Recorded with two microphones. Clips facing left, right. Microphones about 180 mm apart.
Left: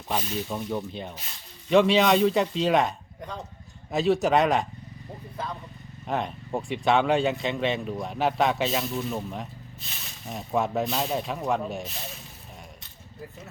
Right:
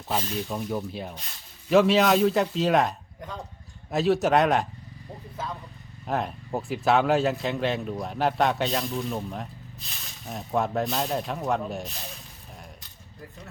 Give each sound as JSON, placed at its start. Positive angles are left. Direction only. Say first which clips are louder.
{"t": 0.2, "sound": "speech", "louder": "even", "side_deg": 0}
{"t": 6.1, "sound": "speech", "louder": "even", "side_deg": 0}